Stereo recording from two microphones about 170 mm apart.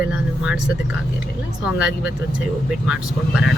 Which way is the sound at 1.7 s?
5° right (ahead or behind).